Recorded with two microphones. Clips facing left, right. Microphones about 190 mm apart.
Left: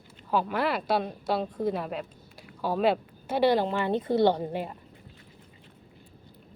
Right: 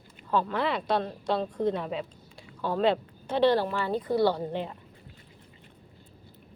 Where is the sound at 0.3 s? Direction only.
10° left (ahead or behind).